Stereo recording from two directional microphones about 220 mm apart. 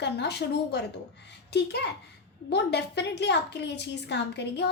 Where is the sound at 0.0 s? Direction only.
50° left (ahead or behind).